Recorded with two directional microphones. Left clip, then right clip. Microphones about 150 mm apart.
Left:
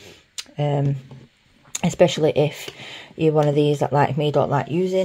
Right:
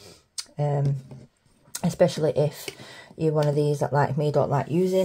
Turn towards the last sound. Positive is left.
turn(degrees=5)  # may be behind; listen again after turning